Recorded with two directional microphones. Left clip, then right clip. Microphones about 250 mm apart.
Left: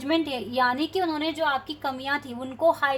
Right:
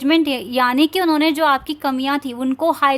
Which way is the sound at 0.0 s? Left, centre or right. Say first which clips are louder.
Right 9 dB; right.